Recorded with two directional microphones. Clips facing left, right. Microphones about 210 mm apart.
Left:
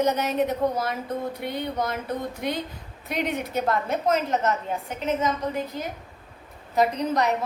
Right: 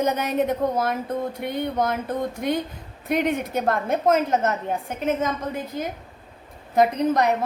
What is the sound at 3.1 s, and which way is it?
A woman's voice, 50° right (ahead or behind).